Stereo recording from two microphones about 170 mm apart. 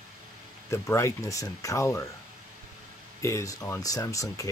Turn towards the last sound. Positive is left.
turn(degrees=20)  # may be behind; listen again after turning